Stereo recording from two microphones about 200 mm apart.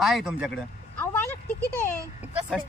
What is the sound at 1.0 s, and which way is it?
Vehicle, 10° left (ahead or behind).